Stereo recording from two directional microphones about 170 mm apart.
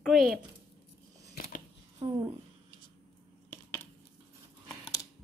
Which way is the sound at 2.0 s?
25° right (ahead or behind).